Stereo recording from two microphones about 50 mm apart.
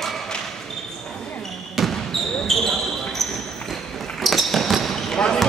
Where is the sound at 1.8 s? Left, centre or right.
Centre.